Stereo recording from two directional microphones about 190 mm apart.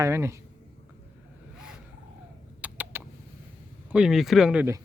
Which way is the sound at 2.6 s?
10° right (ahead or behind).